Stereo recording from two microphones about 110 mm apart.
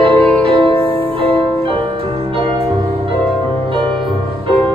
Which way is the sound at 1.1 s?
55° right (ahead or behind).